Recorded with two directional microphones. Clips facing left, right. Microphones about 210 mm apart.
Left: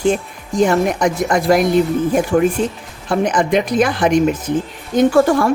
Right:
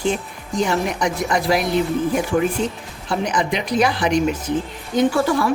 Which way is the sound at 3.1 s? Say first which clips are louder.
Left 5 dB; 50° left (ahead or behind).